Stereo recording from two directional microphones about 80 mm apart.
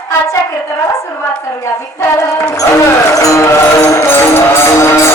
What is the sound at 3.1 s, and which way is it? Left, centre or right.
Music, left.